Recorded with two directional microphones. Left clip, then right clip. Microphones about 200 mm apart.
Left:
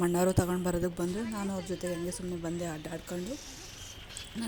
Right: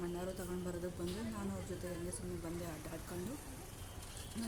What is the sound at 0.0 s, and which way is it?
A woman's voice, 45° left (ahead or behind).